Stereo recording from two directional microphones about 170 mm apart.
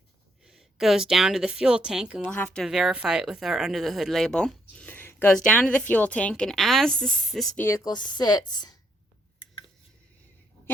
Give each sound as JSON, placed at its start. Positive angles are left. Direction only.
{"t": 0.4, "sound": "speech", "side_deg": 0}
{"t": 2.2, "sound": "speech", "side_deg": 10}
{"t": 7.6, "sound": "a woman's voice", "side_deg": 15}
{"t": 7.9, "sound": "a woman's voice", "side_deg": 25}